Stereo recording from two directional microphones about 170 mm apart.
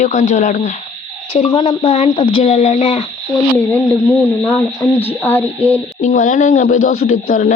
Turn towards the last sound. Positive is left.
turn(degrees=60)  # may be behind; listen again after turning